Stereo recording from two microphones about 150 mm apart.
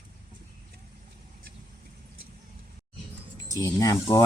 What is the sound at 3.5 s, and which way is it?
Speech, 25° left (ahead or behind).